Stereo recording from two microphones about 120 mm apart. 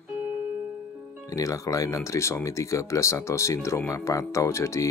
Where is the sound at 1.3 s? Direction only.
25° left (ahead or behind).